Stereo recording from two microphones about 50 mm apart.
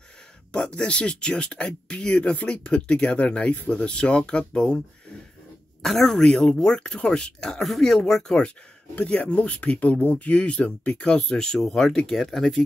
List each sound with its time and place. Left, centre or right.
0.5 s speech: centre
5.8 s speech: centre
7.6 s speech: centre
8.9 s speech: left
11.1 s speech: centre